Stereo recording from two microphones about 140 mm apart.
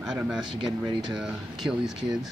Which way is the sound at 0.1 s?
5° right (ahead or behind).